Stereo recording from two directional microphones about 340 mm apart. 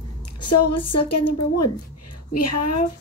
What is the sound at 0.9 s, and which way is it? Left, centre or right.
A woman's voice, left.